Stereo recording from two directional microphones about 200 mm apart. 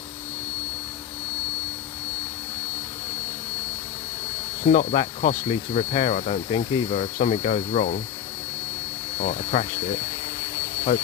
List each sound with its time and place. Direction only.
4.6 s speech: 35° left (ahead or behind)
9.1 s speech: 35° left (ahead or behind)